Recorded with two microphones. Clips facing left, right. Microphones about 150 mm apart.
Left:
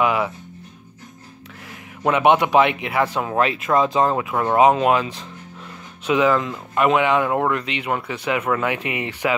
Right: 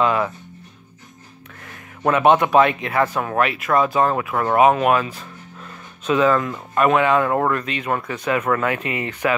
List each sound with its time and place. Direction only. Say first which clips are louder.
0.0 s speech: right 1 dB; 10° left (ahead or behind)
2.0 s speech: right 1 dB; 15° left (ahead or behind)
3.3 s speech: even; 25° left (ahead or behind)